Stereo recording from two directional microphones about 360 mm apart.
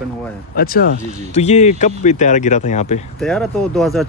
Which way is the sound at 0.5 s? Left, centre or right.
Left.